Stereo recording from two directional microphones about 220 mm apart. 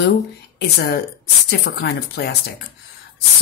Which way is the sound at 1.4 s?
45° left (ahead or behind).